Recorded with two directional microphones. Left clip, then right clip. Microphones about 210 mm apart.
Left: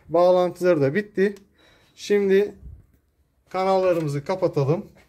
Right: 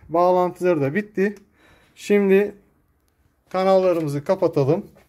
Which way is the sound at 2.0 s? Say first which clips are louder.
Right 2 dB; 30° right (ahead or behind).